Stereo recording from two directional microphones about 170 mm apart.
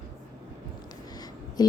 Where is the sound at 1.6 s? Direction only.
25° left (ahead or behind).